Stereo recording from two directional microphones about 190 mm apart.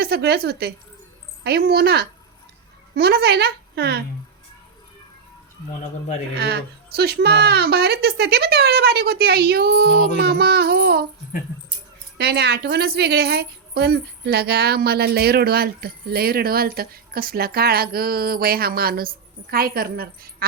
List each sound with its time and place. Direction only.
0.0 s a woman's voice: 60° right (ahead or behind)
6.3 s a woman's voice: 55° right (ahead or behind)
12.1 s a woman's voice: 60° right (ahead or behind)